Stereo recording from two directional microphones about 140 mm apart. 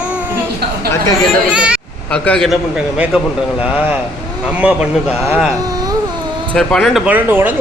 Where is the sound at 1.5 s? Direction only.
10° right (ahead or behind).